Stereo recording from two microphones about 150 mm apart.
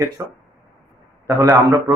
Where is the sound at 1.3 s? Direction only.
25° right (ahead or behind).